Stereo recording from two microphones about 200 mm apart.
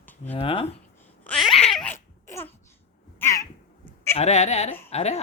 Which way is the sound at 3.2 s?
15° left (ahead or behind).